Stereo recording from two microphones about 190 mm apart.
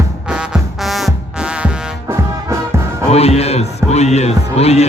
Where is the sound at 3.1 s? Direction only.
35° left (ahead or behind).